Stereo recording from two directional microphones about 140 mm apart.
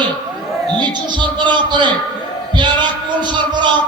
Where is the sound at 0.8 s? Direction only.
35° right (ahead or behind).